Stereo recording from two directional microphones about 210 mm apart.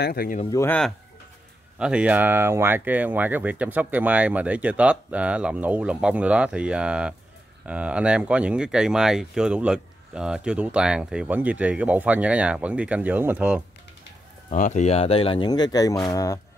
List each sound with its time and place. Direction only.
0.0 s speech: 45° left (ahead or behind)
0.6 s speech: 5° left (ahead or behind)
1.8 s speech: 5° right (ahead or behind)
14.5 s speech: 35° left (ahead or behind); by 16.3 s 15° left (ahead or behind)